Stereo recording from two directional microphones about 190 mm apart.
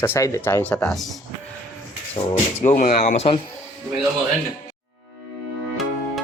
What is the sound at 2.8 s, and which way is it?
Speech, 40° left (ahead or behind).